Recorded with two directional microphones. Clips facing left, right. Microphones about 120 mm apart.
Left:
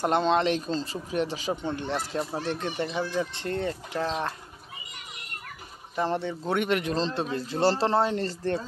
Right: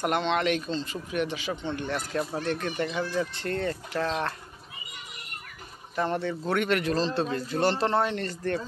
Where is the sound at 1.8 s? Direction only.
25° left (ahead or behind).